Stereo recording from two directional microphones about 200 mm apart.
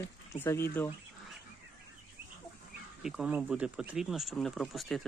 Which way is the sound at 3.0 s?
5° right (ahead or behind).